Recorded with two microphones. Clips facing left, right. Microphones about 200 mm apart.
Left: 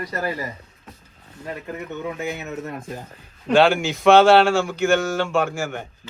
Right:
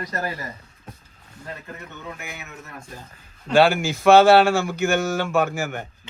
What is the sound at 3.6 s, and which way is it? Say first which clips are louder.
Speech: even; centre (ahead or behind).